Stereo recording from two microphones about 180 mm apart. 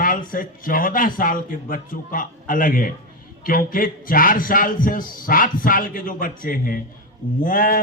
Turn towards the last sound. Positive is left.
turn(degrees=50)  # may be behind; listen again after turning